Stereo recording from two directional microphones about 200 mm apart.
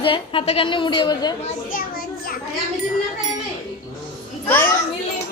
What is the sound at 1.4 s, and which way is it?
Speech, 45° left (ahead or behind).